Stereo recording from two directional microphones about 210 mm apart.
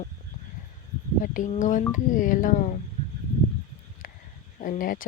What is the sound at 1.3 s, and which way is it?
Speech, 35° left (ahead or behind).